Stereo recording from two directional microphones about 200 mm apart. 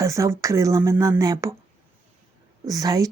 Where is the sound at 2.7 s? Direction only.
15° right (ahead or behind).